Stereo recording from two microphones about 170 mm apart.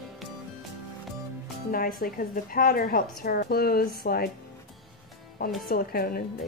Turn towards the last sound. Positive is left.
turn(degrees=60)  # may be behind; listen again after turning